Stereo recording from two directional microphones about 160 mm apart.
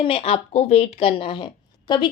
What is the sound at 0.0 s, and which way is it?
Speech, 35° left (ahead or behind).